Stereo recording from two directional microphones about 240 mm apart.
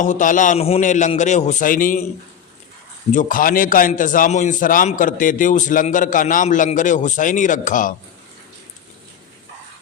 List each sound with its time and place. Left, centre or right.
0.0 s a man's voice: left
3.1 s a man's voice: left